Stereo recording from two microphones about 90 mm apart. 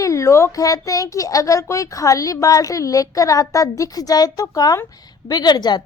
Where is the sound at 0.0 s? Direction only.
35° left (ahead or behind).